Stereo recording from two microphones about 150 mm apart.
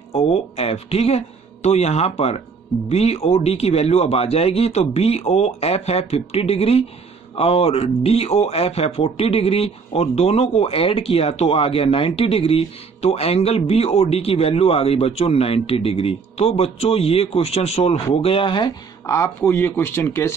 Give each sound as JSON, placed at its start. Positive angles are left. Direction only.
{"t": 0.1, "sound": "speech", "side_deg": 40}
{"t": 19.0, "sound": "speech", "side_deg": 15}